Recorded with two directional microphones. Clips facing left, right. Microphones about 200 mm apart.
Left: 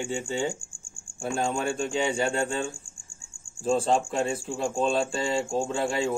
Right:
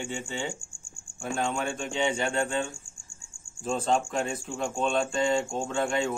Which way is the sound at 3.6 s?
35° left (ahead or behind).